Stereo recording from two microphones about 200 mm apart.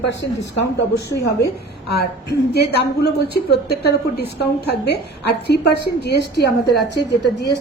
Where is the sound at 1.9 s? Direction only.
55° left (ahead or behind).